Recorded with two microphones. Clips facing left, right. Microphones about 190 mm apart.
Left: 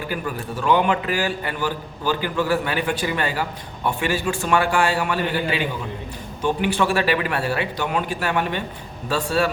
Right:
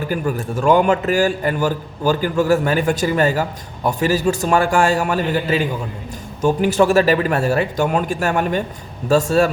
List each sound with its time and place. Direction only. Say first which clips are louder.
0.1 s a man's voice: right 6 dB; 45° right (ahead or behind)